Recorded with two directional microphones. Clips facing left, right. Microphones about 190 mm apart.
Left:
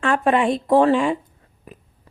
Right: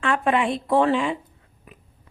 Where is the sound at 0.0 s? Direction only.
45° left (ahead or behind).